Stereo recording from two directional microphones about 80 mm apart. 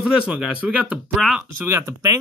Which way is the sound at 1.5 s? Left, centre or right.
Right.